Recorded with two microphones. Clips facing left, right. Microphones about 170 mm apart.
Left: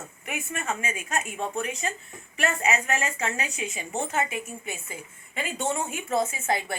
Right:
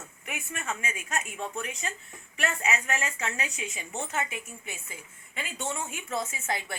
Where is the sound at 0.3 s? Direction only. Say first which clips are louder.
Left 4 dB; 45° left (ahead or behind).